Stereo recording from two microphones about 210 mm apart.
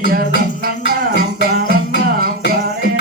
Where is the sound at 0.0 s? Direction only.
45° right (ahead or behind).